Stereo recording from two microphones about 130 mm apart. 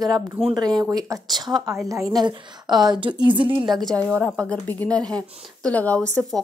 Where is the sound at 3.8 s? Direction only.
10° left (ahead or behind).